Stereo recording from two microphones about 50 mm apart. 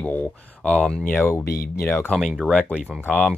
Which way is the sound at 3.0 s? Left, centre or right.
Left.